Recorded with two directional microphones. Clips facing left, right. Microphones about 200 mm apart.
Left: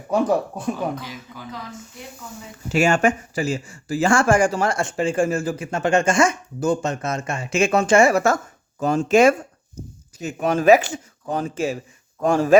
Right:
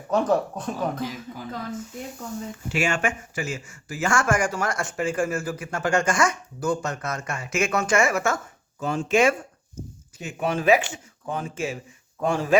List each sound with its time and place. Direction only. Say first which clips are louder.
0.1 s speech: left 2 dB; 10° left (ahead or behind)
0.9 s speech: right 3 dB; 50° right (ahead or behind)
2.6 s speech: left 8 dB; 40° left (ahead or behind)